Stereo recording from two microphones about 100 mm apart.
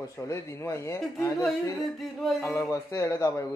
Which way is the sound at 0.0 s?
30° left (ahead or behind).